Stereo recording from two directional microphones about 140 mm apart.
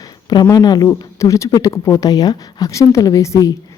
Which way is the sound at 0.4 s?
30° left (ahead or behind).